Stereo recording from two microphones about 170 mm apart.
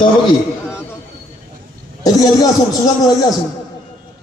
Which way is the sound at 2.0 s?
20° left (ahead or behind).